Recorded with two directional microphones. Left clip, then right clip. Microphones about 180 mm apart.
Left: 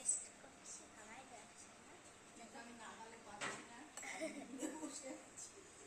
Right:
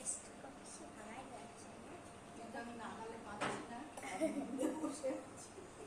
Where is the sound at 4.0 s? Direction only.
Centre (ahead or behind).